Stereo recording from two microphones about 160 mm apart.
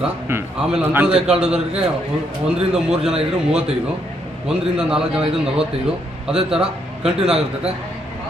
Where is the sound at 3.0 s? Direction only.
5° right (ahead or behind).